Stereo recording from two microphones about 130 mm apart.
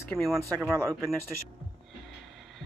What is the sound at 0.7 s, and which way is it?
Speech, 25° right (ahead or behind).